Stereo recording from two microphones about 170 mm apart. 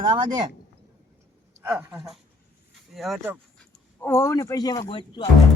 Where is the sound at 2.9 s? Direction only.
Centre (ahead or behind).